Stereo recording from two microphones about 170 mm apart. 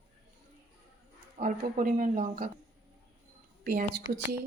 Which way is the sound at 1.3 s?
55° right (ahead or behind).